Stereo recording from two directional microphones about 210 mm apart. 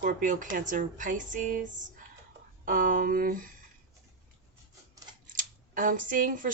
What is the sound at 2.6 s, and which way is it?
Speech, 40° right (ahead or behind).